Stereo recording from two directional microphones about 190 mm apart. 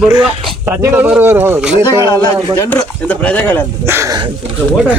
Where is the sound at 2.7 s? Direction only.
10° left (ahead or behind).